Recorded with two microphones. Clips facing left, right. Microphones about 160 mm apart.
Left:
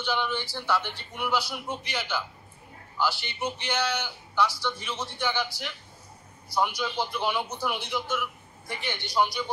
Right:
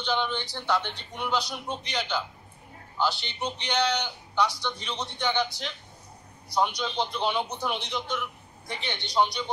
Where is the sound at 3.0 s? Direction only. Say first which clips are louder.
Right 1 dB; 20° right (ahead or behind).